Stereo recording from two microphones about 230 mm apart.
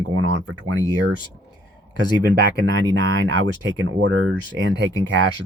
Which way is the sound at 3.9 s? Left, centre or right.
Right.